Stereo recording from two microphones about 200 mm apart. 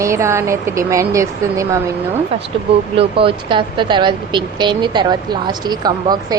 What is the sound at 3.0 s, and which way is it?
Speech, 25° right (ahead or behind).